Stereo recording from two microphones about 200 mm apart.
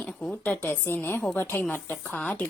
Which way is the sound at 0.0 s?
5° left (ahead or behind).